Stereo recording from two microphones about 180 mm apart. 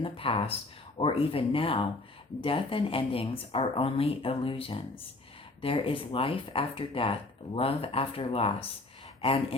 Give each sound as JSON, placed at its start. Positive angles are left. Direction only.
{"t": 0.0, "sound": "speech", "side_deg": 30}